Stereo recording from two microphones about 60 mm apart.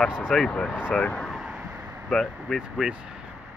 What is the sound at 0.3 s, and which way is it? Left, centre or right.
Speech, centre.